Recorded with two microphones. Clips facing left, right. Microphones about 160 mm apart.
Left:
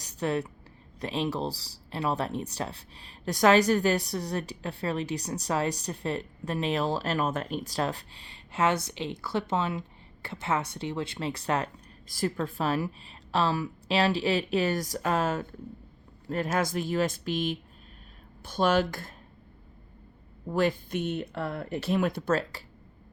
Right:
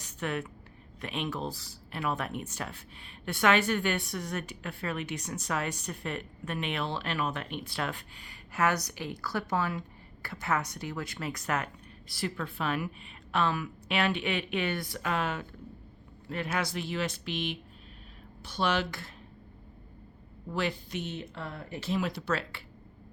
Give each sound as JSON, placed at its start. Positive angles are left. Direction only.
{"t": 0.0, "sound": "a woman's voice", "side_deg": 35}
{"t": 12.1, "sound": "speech", "side_deg": 45}
{"t": 20.5, "sound": "speech", "side_deg": 45}